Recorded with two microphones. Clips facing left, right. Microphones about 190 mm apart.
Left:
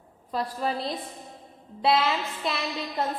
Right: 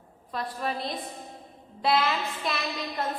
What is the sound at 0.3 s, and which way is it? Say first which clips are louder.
Speech: left 3 dB; 30° left (ahead or behind).